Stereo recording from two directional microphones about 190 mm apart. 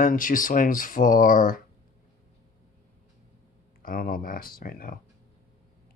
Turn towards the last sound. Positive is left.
turn(degrees=45)  # may be behind; listen again after turning